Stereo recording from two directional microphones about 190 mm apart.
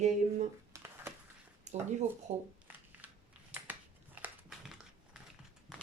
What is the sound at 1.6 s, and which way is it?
Speech, 40° right (ahead or behind).